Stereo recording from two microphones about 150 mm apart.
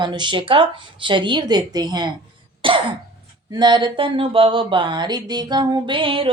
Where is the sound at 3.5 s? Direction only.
30° right (ahead or behind).